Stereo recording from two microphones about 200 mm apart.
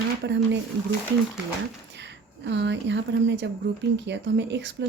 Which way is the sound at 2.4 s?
60° right (ahead or behind).